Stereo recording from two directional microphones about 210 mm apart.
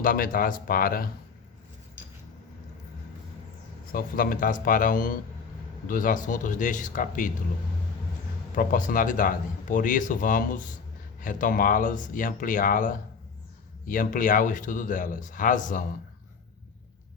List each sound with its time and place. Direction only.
0.0 s speech: 40° left (ahead or behind)
3.9 s a man's voice: 45° left (ahead or behind)
8.5 s a man's voice: 40° left (ahead or behind)